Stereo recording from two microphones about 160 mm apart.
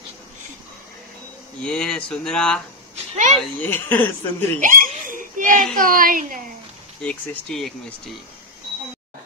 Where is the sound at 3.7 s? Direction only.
15° left (ahead or behind).